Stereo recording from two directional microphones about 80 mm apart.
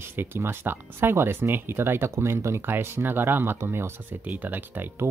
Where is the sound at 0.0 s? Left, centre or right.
Right.